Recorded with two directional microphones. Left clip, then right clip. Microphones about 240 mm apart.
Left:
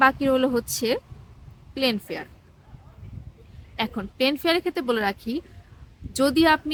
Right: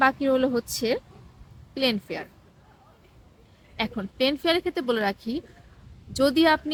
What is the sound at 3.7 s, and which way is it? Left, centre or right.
A woman's voice, centre.